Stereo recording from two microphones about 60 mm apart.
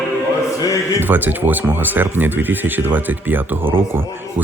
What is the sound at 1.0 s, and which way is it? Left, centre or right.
Speech, right.